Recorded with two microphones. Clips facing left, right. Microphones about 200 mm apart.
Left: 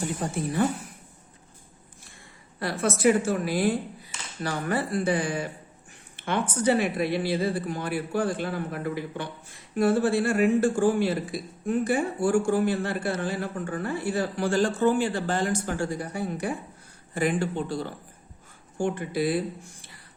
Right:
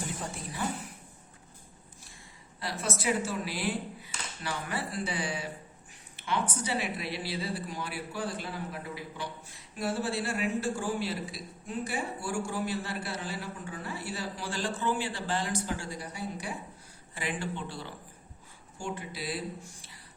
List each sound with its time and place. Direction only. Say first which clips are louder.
2.6 s a man's voice: left 9 dB; 55° left (ahead or behind)
6.1 s a sound: left 4 dB; 55° left (ahead or behind)
6.6 s a man's voice: left 10 dB; 55° left (ahead or behind)